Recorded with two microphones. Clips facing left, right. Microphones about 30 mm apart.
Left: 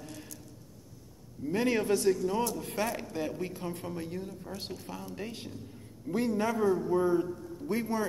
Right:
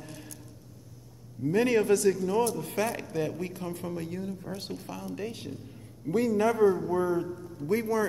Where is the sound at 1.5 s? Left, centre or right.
Right.